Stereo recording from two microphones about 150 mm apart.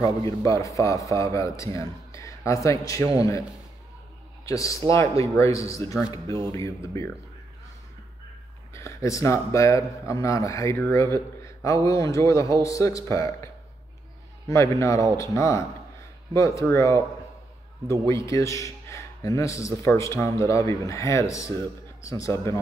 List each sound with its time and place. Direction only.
0.2 s a man's voice: 20° left (ahead or behind)
4.5 s a man's voice: 20° left (ahead or behind)
8.7 s a man's voice: 20° left (ahead or behind)
14.5 s a man's voice: 20° left (ahead or behind)
18.0 s a man's voice: 20° left (ahead or behind)